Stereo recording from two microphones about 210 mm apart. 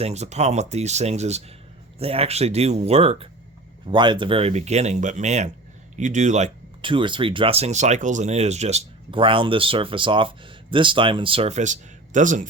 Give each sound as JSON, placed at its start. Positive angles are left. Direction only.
{"t": 0.0, "sound": "speech", "side_deg": -30}